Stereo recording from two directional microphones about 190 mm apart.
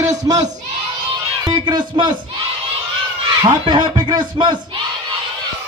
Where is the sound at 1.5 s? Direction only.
20° right (ahead or behind).